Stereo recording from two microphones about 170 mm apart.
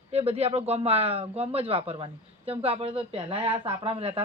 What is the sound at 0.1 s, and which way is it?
Speech, 40° right (ahead or behind).